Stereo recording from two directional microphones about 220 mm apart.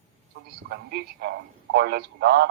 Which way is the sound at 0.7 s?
50° right (ahead or behind).